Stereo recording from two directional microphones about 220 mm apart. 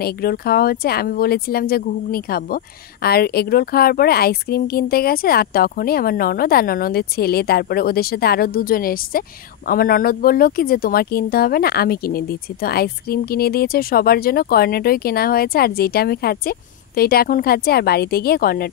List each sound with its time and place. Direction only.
0.0 s speech: 45° left (ahead or behind)